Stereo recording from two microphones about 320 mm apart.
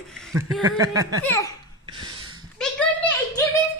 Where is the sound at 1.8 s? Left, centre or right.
Centre.